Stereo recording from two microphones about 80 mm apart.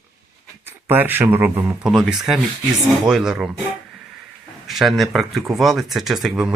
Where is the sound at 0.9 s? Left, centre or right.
Right.